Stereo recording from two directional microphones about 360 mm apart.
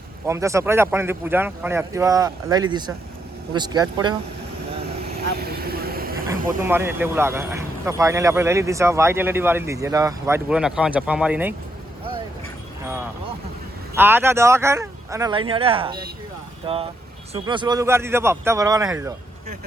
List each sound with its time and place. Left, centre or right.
0.3 s speech: centre
5.0 s vehicle: right
6.7 s speech: centre
12.8 s speech: centre
17.3 s speech: centre